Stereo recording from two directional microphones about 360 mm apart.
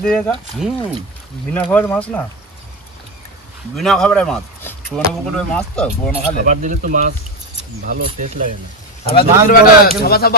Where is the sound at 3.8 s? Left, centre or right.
Centre.